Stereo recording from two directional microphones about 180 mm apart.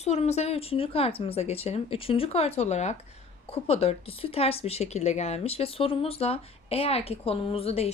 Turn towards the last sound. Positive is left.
turn(degrees=35)  # may be behind; listen again after turning